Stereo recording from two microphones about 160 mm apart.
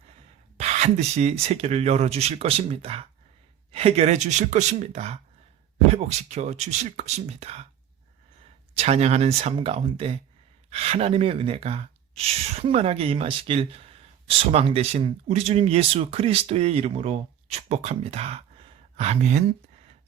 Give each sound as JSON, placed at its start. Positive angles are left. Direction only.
{"t": 0.5, "sound": "speech", "side_deg": -45}
{"t": 8.7, "sound": "speech", "side_deg": -40}